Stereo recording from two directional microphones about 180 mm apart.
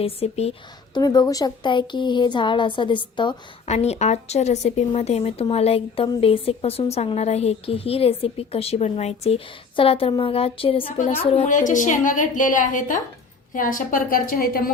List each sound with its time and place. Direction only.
0.0 s a woman's voice: 35° left (ahead or behind)
0.9 s speech: 20° left (ahead or behind)
3.7 s a woman's voice: 35° left (ahead or behind); by 14.7 s 55° left (ahead or behind)